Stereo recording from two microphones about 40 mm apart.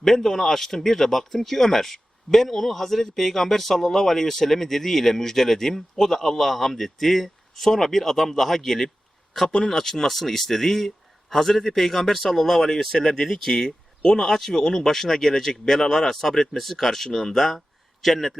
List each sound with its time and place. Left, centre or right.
0.0 s a man's voice: centre